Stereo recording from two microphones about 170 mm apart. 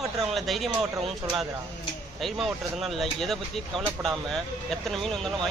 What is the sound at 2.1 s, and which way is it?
Speech, centre (ahead or behind).